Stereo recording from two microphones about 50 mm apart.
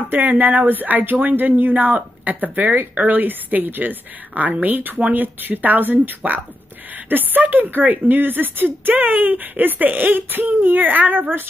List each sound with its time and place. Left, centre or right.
0.1 s speech: right